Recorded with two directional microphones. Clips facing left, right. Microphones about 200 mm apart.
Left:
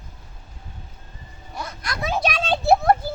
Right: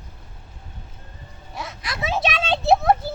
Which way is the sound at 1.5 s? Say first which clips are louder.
Left 1 dB; centre (ahead or behind).